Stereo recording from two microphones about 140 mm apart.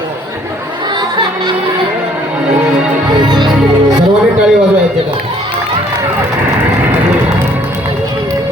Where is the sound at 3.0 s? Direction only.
30° right (ahead or behind).